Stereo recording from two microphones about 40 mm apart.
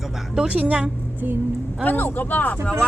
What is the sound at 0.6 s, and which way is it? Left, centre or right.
Speech, right.